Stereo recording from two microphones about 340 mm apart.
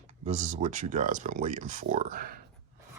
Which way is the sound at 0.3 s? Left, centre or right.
Centre.